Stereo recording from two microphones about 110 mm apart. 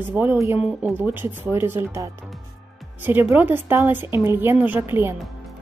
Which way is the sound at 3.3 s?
20° right (ahead or behind).